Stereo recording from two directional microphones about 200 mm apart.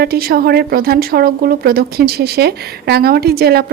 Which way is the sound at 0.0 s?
50° right (ahead or behind).